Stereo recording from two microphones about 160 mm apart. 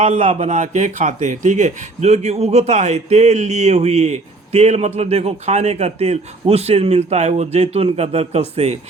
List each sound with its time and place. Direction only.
0.0 s speech: 45° right (ahead or behind)